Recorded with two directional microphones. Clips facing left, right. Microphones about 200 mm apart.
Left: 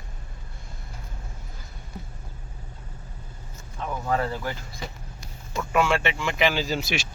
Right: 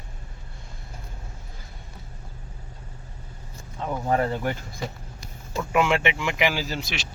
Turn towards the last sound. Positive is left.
turn(degrees=-5)  # may be behind; listen again after turning